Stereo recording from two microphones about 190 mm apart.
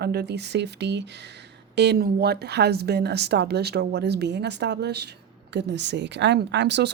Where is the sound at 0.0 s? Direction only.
60° right (ahead or behind).